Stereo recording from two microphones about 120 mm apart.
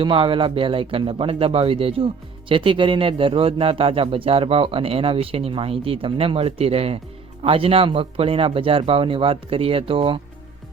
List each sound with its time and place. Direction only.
0.0 s a man's voice: 45° right (ahead or behind)